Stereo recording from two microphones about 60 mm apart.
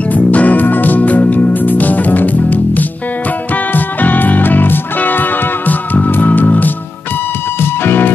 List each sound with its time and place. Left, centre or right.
0.1 s music: left